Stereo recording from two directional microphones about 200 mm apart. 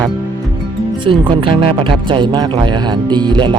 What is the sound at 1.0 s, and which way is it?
Speech, 25° right (ahead or behind).